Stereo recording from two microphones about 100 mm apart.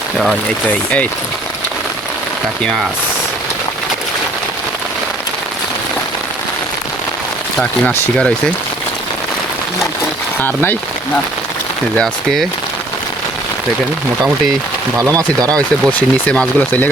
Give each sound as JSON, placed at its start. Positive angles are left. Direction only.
{"t": 0.7, "sound": "speech", "side_deg": 15}
{"t": 7.6, "sound": "speech", "side_deg": 10}
{"t": 10.4, "sound": "speech", "side_deg": 20}
{"t": 11.9, "sound": "speech", "side_deg": 5}
{"t": 14.9, "sound": "speech", "side_deg": -35}
{"t": 15.5, "sound": "speech", "side_deg": 15}